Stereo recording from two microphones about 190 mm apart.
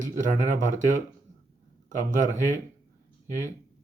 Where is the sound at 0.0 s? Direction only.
45° right (ahead or behind).